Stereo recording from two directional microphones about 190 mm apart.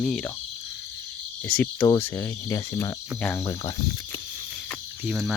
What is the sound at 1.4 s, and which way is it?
Cricket, 5° left (ahead or behind).